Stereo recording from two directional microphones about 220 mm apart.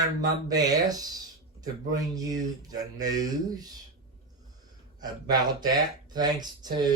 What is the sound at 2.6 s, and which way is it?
Speech, 15° right (ahead or behind).